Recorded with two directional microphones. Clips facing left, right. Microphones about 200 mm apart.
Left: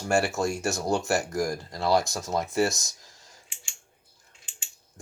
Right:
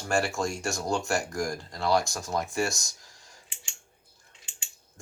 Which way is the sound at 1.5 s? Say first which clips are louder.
Even; 20° left (ahead or behind).